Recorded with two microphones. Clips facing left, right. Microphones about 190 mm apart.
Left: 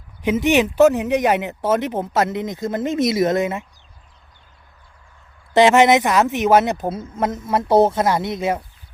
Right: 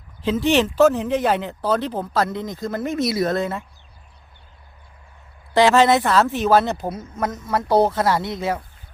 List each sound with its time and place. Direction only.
0.3 s speech: 15° left (ahead or behind)
5.5 s speech: 20° left (ahead or behind)